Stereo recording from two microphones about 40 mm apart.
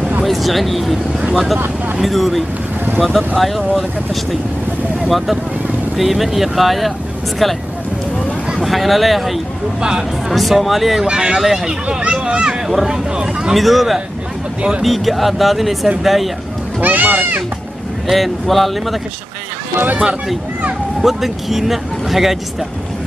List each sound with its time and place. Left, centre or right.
0.2 s speech: centre
8.6 s speech: centre
9.8 s speech: centre
10.3 s speech: centre
11.1 s speech: right
11.3 s speech: centre
12.0 s speech: right
12.6 s speech: centre
12.9 s speech: centre
13.6 s speech: centre
16.8 s speech: right
18.0 s speech: centre
21.0 s speech: centre